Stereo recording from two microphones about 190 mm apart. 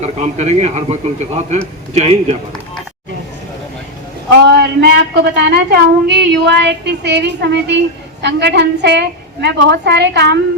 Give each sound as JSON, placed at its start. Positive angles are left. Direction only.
{"t": 0.0, "sound": "a man's voice", "side_deg": -35}
{"t": 4.5, "sound": "a woman's voice", "side_deg": -60}